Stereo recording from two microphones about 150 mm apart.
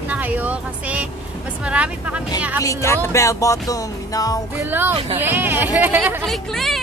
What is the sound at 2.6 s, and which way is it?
Music, 20° left (ahead or behind).